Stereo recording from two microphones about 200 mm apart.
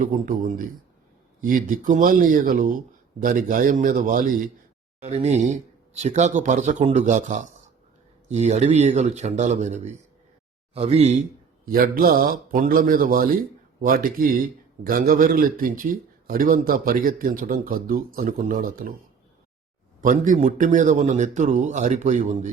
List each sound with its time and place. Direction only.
0.0 s a man's voice: 40° right (ahead or behind)
20.0 s a man's voice: 40° right (ahead or behind)